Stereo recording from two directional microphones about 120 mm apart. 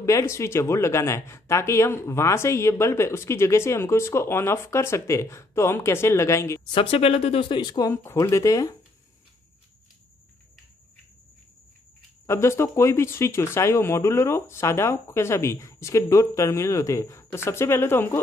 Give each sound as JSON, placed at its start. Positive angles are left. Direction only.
{"t": 0.0, "sound": "speech", "side_deg": 25}
{"t": 6.7, "sound": "speech", "side_deg": 50}
{"t": 7.9, "sound": "speech", "side_deg": 20}
{"t": 12.3, "sound": "speech", "side_deg": 20}